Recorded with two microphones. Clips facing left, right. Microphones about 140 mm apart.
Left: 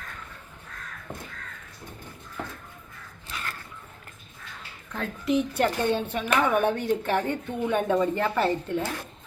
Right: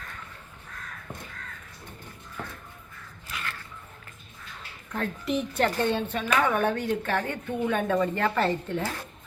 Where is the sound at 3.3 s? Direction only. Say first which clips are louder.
Even; 25° left (ahead or behind).